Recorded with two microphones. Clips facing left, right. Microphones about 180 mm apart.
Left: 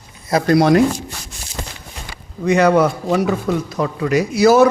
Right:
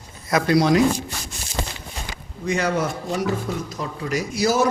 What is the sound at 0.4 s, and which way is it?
Speech, 55° left (ahead or behind).